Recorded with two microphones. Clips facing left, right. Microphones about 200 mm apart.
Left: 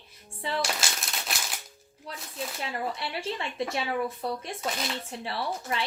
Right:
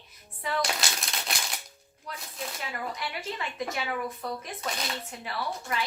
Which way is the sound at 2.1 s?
30° left (ahead or behind).